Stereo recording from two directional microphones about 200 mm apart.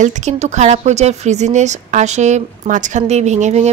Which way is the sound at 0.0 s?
35° right (ahead or behind).